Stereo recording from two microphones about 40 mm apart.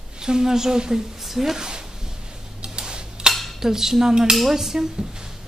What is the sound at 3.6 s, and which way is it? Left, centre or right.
Speech, centre.